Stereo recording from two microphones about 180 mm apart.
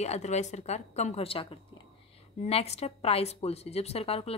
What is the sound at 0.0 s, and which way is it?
A woman's voice, 40° left (ahead or behind).